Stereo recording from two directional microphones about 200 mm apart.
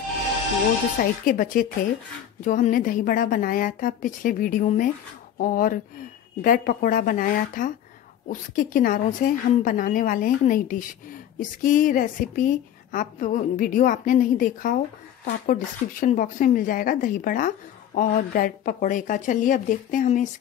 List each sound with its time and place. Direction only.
1.2 s a woman's voice: 45° left (ahead or behind)